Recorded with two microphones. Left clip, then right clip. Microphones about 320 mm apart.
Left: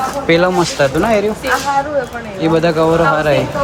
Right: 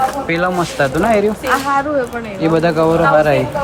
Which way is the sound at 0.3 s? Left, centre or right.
Centre.